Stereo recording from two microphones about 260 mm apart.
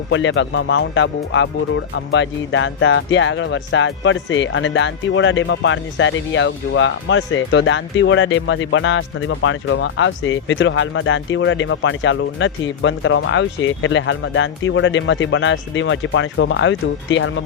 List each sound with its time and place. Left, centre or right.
0.1 s speech: left